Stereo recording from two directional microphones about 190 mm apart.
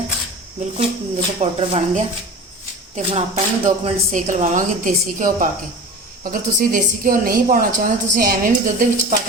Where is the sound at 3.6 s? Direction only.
40° right (ahead or behind).